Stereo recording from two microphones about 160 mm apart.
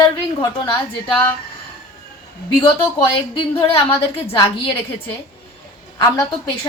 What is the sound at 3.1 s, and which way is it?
A woman's voice, 30° left (ahead or behind).